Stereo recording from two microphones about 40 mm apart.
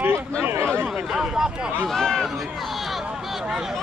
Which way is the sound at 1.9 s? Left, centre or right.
Centre.